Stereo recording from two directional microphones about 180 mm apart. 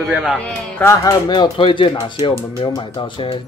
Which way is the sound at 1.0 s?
25° left (ahead or behind).